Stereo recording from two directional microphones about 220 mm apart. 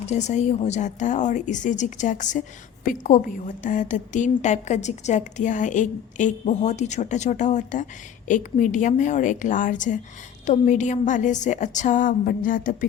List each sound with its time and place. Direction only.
0.0 s a woman's voice: 30° left (ahead or behind)